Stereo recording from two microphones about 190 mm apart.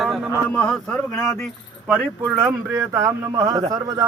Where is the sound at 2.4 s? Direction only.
10° right (ahead or behind).